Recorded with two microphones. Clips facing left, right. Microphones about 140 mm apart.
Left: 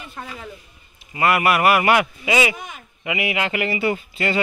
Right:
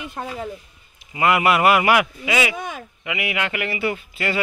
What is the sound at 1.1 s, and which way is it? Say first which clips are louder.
Speech: even; 20° right (ahead or behind).